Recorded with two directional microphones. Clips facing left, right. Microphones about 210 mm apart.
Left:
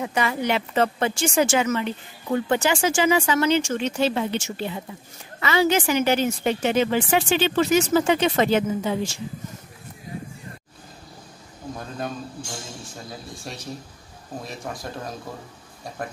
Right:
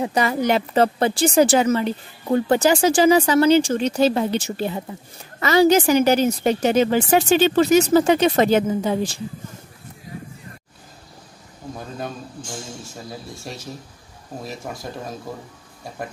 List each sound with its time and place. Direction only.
0.0 s speech: 40° right (ahead or behind)
13.4 s speech: centre (ahead or behind)